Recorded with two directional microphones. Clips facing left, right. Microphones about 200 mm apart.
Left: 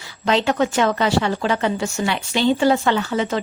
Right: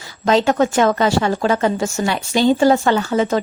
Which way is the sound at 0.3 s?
45° right (ahead or behind).